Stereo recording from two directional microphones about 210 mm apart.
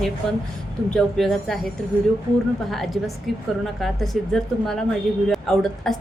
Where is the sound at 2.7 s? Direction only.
Centre (ahead or behind).